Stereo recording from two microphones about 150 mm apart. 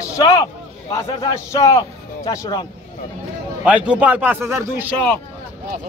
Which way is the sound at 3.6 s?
10° right (ahead or behind).